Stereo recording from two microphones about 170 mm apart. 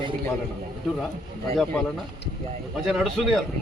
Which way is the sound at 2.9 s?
Centre (ahead or behind).